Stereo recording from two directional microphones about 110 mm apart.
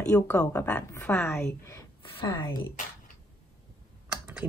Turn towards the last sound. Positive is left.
turn(degrees=-10)  # may be behind; listen again after turning